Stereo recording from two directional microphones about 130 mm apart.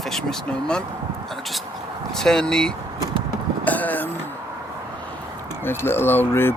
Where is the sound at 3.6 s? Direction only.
15° left (ahead or behind).